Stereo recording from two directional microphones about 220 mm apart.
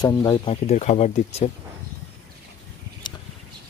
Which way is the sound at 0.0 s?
15° left (ahead or behind).